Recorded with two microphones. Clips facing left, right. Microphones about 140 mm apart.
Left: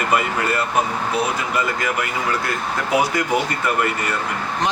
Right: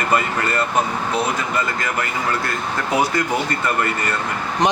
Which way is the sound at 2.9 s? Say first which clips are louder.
Left 1 dB; 10° left (ahead or behind).